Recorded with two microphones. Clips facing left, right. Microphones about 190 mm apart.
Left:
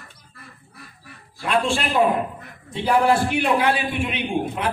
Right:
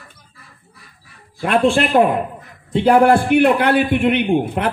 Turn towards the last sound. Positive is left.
turn(degrees=-60)  # may be behind; listen again after turning